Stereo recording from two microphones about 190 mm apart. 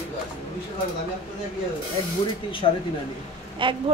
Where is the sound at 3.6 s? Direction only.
25° right (ahead or behind).